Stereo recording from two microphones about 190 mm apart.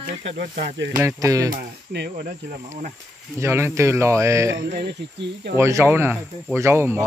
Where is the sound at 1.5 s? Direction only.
65° right (ahead or behind).